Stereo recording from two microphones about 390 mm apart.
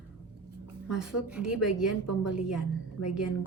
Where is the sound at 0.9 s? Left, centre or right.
Centre.